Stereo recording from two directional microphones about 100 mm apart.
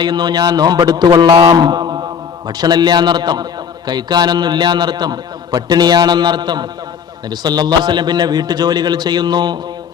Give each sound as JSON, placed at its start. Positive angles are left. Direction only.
{"t": 0.0, "sound": "a man's voice", "side_deg": -45}